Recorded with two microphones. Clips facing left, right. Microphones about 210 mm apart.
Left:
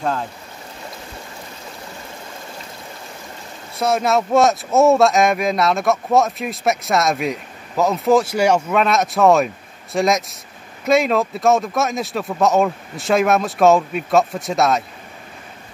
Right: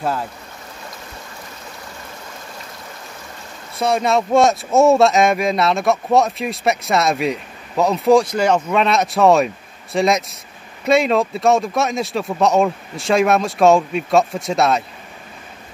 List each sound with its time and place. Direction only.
3.7 s speech: centre (ahead or behind)